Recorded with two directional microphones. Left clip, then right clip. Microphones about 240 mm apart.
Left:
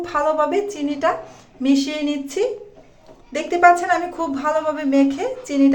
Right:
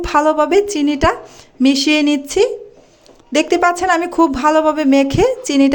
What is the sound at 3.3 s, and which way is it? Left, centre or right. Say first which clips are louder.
Speech: even; right.